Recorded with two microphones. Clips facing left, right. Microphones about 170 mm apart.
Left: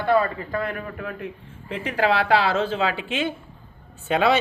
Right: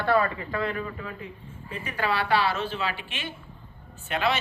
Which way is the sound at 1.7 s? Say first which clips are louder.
Left 7 dB; 85° left.